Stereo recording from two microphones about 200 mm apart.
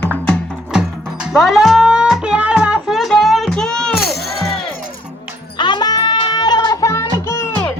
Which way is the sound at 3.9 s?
50° left (ahead or behind).